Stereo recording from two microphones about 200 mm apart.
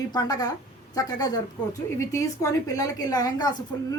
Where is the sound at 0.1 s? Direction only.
20° left (ahead or behind).